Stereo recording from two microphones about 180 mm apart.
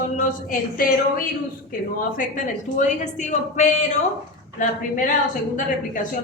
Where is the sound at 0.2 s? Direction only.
50° left (ahead or behind).